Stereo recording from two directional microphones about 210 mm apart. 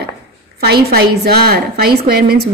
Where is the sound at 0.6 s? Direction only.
50° right (ahead or behind).